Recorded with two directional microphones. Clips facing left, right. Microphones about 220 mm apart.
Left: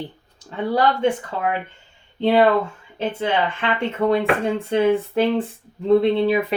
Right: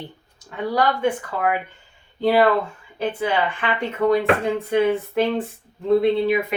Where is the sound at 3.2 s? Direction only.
25° left (ahead or behind).